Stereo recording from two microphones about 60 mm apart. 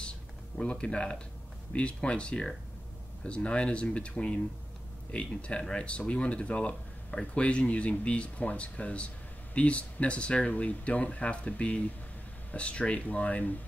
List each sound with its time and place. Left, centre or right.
0.6 s speech: centre